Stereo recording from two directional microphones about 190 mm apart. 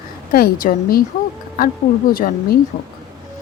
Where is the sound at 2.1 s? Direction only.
50° left (ahead or behind).